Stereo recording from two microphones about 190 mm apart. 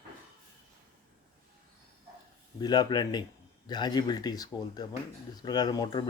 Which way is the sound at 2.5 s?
20° left (ahead or behind).